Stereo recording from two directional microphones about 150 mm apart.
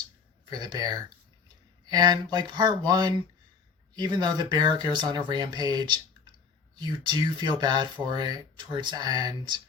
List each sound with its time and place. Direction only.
0.5 s speech: 25° right (ahead or behind)